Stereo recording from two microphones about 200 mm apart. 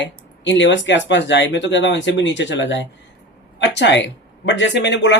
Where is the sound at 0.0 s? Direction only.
65° left (ahead or behind).